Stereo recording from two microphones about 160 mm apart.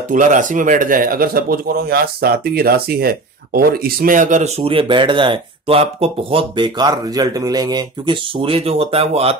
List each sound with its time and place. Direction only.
0.1 s a man's voice: 55° right (ahead or behind)